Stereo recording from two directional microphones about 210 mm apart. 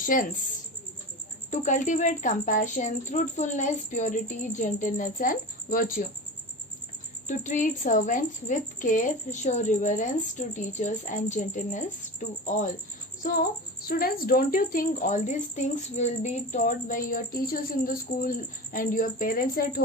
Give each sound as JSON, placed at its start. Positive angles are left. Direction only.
{"t": 0.0, "sound": "speech", "side_deg": 40}
{"t": 1.5, "sound": "a woman's voice", "side_deg": 35}
{"t": 7.3, "sound": "a woman's voice", "side_deg": 35}
{"t": 13.8, "sound": "a woman's voice", "side_deg": 45}